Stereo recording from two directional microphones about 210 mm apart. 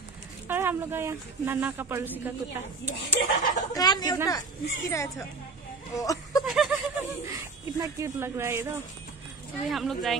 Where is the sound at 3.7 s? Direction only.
20° left (ahead or behind).